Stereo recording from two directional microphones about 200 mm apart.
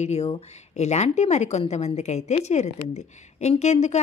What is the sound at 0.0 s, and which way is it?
A woman's voice, 30° left (ahead or behind).